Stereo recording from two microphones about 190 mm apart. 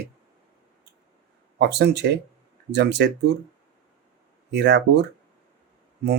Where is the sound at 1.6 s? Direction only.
65° right (ahead or behind).